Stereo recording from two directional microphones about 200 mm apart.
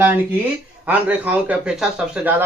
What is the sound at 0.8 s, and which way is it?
Speech, 5° right (ahead or behind).